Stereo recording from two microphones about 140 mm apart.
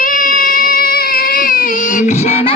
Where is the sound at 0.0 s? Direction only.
80° left.